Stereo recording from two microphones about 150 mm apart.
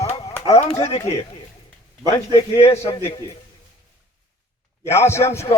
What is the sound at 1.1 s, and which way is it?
A man's voice, 40° left (ahead or behind).